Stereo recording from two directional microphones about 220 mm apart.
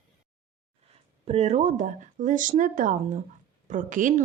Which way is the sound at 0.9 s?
25° right (ahead or behind).